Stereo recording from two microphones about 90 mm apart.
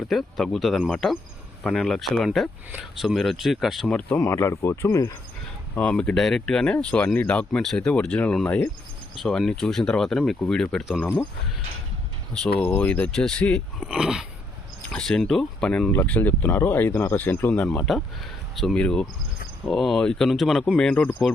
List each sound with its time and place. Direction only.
0.1 s speech: centre (ahead or behind)
3.9 s speech: 15° left (ahead or behind)
4.3 s speech: 35° left (ahead or behind)
5.8 s speech: 10° left (ahead or behind)
9.1 s speech: centre (ahead or behind)
12.3 s speech: 10° left (ahead or behind)
13.1 s speech: 5° left (ahead or behind)
13.7 s speech: 10° right (ahead or behind)
14.9 s speech: 5° left (ahead or behind)
17.5 s speech: 10° left (ahead or behind)
20.7 s speech: 10° left (ahead or behind)